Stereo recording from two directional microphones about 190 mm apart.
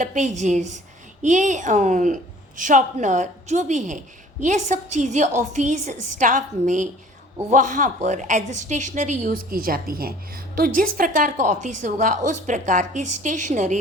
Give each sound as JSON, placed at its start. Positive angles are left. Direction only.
{"t": 0.0, "sound": "a woman's voice", "side_deg": -40}